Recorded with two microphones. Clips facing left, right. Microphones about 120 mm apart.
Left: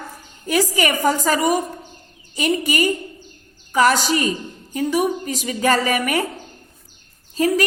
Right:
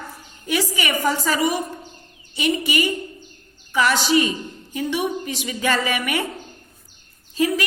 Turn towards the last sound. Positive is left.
turn(degrees=40)  # may be behind; listen again after turning